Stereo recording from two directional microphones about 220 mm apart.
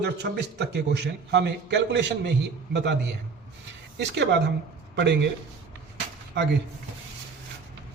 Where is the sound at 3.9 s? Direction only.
50° right (ahead or behind).